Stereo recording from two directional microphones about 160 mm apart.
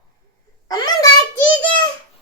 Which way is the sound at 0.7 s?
25° left (ahead or behind).